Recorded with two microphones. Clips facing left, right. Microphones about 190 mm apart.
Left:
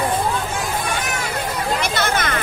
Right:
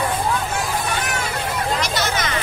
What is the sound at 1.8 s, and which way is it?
Hubbub, 55° left (ahead or behind).